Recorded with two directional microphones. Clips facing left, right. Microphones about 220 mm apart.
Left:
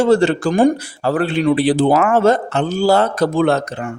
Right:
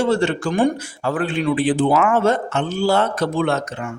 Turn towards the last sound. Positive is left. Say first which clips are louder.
# left 5 dB
turn(degrees=35)  # may be behind; listen again after turning